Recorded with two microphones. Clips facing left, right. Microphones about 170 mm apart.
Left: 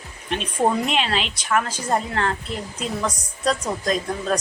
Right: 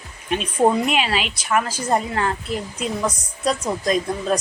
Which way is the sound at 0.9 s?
10° right (ahead or behind).